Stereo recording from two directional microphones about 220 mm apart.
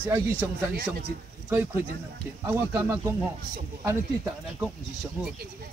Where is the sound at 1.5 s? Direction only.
10° right (ahead or behind).